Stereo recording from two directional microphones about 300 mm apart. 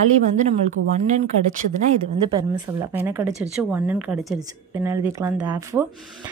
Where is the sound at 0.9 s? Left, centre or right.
Right.